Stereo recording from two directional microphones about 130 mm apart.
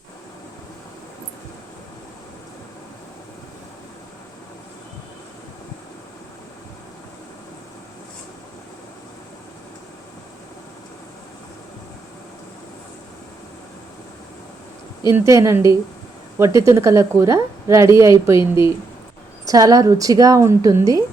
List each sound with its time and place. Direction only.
15.1 s a woman's voice: 25° right (ahead or behind)
19.5 s a woman's voice: 25° right (ahead or behind)